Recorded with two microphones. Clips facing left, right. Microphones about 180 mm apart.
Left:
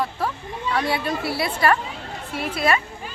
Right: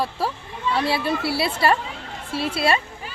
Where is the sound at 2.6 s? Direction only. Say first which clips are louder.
Even; 30° right (ahead or behind).